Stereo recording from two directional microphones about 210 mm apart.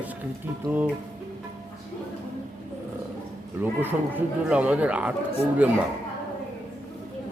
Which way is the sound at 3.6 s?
10° right (ahead or behind).